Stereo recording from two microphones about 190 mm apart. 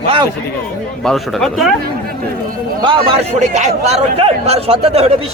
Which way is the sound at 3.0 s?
40° right (ahead or behind).